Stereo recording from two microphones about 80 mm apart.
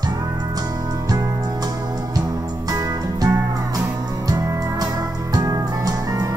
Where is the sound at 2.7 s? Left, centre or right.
Right.